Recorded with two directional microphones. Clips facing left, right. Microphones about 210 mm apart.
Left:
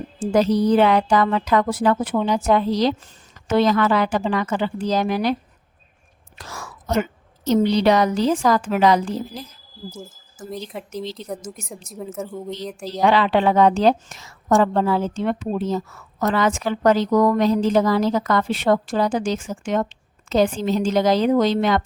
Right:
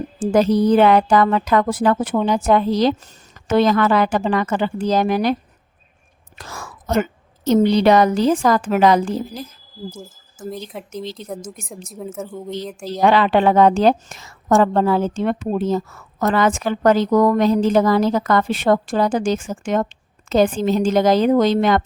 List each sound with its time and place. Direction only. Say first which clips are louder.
0.2 s a woman's voice: right 2 dB; 50° right (ahead or behind)
6.4 s a woman's voice: right 2 dB; 50° right (ahead or behind)
10.7 s a woman's voice: even; centre (ahead or behind)
12.9 s a woman's voice: right 2 dB; 50° right (ahead or behind)